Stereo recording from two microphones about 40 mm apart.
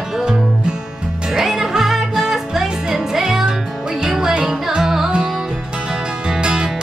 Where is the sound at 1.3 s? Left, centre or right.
Centre.